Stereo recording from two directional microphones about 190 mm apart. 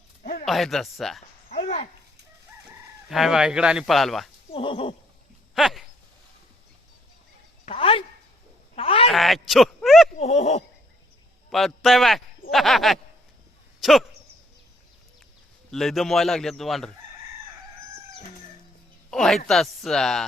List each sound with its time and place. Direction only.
0.2 s speech: 50° left (ahead or behind)
0.4 s a man's voice: centre (ahead or behind)
1.5 s a sound: 50° left (ahead or behind)
3.1 s a man's voice: centre (ahead or behind)
4.5 s horse: 30° left (ahead or behind)
5.5 s a sound: centre (ahead or behind)
7.6 s a sound: 30° left (ahead or behind)
9.1 s speech: centre (ahead or behind)
10.2 s a sound: 35° left (ahead or behind)
11.5 s a man's voice: centre (ahead or behind)
15.7 s a man's voice: centre (ahead or behind)
19.1 s a man's voice: centre (ahead or behind)